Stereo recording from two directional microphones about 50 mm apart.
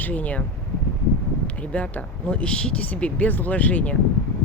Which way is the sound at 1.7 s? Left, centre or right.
Left.